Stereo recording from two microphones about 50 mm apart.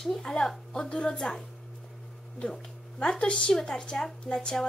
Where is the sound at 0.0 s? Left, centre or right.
Centre.